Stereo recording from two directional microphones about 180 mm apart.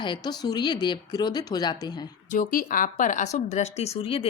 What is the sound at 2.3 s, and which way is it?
Speech, 50° left (ahead or behind).